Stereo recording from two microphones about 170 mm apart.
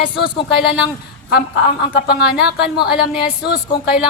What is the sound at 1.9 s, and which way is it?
Speech, 70° left (ahead or behind).